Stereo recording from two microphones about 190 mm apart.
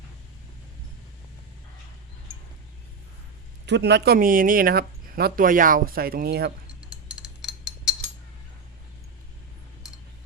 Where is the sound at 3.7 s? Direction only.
65° right (ahead or behind).